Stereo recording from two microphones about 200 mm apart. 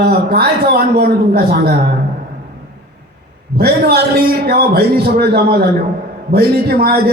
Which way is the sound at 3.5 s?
50° right (ahead or behind).